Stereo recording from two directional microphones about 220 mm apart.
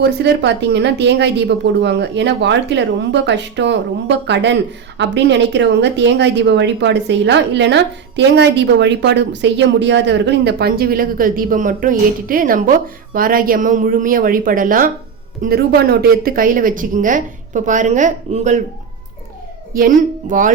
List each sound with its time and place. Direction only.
0.0 s a woman's voice: 50° right (ahead or behind); by 18.6 s 35° right (ahead or behind)
19.7 s speech: 40° right (ahead or behind)